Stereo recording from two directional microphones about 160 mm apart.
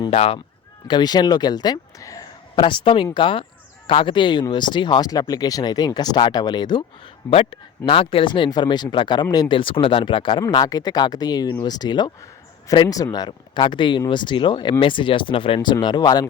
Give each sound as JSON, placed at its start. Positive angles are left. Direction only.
{"t": 0.1, "sound": "speech", "side_deg": 35}
{"t": 0.9, "sound": "speech", "side_deg": 25}
{"t": 7.3, "sound": "speech", "side_deg": 40}